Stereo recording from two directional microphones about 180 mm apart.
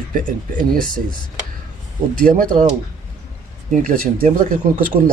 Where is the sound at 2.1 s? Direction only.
50° right (ahead or behind).